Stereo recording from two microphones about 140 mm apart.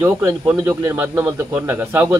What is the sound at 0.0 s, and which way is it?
A man's voice, 20° right (ahead or behind).